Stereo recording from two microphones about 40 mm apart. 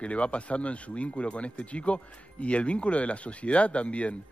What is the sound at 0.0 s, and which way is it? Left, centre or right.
Speech, left.